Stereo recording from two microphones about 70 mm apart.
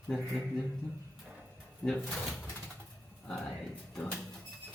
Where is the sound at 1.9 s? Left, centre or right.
Centre.